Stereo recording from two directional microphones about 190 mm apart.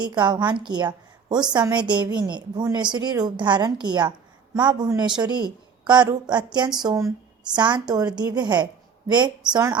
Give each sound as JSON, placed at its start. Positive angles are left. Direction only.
{"t": 0.0, "sound": "a woman's voice", "side_deg": -20}